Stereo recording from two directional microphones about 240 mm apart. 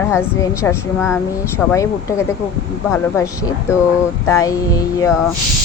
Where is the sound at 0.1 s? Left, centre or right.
Centre.